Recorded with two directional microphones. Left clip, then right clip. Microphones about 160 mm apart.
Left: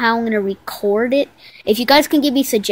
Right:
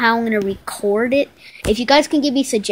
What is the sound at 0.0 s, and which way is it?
Speech, 10° left (ahead or behind).